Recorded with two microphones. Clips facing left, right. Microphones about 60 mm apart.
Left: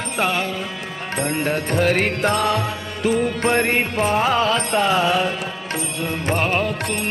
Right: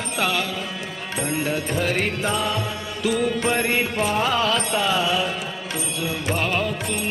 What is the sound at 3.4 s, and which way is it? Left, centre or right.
Music, left.